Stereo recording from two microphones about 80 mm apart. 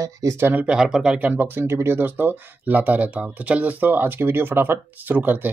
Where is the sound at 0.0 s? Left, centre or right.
Right.